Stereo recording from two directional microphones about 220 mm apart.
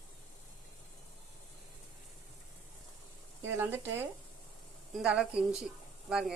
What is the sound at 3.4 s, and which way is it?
Speech, 10° right (ahead or behind).